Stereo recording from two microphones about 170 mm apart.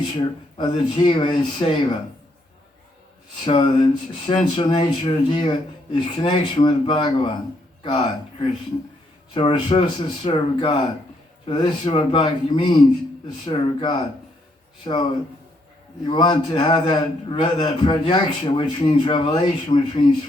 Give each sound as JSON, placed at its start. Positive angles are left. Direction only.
{"t": 0.1, "sound": "a man's voice", "side_deg": 25}
{"t": 3.4, "sound": "a man's voice", "side_deg": 30}
{"t": 9.3, "sound": "a man's voice", "side_deg": 25}
{"t": 16.0, "sound": "a man's voice", "side_deg": 25}